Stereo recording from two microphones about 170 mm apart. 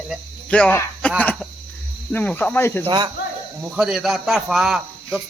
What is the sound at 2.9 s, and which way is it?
Speech, 25° right (ahead or behind).